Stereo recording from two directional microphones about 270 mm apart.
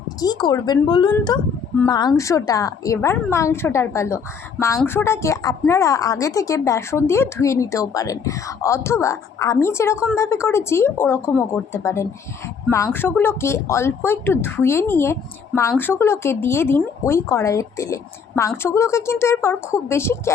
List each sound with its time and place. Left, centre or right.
0.2 s a woman's voice: centre